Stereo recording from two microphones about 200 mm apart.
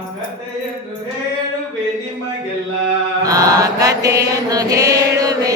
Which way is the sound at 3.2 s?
15° right (ahead or behind).